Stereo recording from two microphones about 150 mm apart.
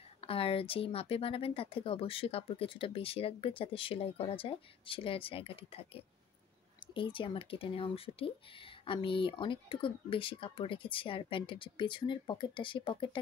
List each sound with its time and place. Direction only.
0.2 s speech: 40° left (ahead or behind)